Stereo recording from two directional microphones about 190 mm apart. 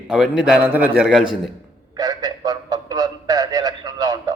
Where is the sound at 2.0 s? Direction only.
20° right (ahead or behind).